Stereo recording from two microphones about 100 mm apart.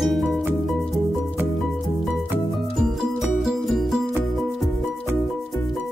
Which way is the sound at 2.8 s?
5° right (ahead or behind).